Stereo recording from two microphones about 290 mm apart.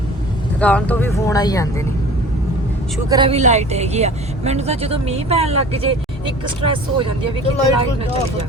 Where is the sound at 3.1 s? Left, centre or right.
Centre.